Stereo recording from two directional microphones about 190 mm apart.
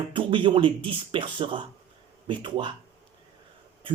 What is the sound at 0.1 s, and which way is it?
Speech, 25° right (ahead or behind).